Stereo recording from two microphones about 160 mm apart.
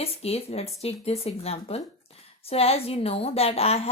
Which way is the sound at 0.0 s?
40° left (ahead or behind).